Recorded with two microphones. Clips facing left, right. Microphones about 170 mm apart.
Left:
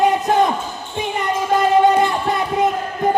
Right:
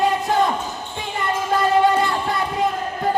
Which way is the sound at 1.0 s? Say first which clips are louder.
Left 4 dB; 20° left (ahead or behind).